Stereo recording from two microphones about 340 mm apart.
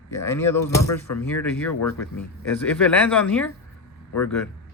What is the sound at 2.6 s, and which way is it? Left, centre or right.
Speech, centre.